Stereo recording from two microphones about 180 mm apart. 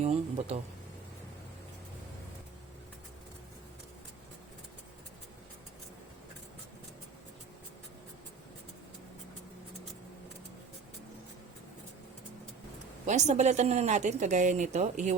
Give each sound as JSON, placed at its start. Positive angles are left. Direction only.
{"t": 0.0, "sound": "speech", "side_deg": -40}
{"t": 13.1, "sound": "a woman's voice", "side_deg": -40}